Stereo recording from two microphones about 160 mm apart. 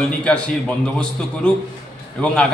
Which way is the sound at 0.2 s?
10° left (ahead or behind).